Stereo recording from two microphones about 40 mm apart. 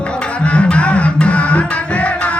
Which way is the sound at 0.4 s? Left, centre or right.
Left.